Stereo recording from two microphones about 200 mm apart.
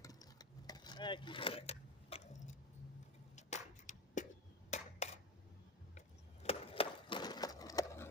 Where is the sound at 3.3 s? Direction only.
35° left (ahead or behind).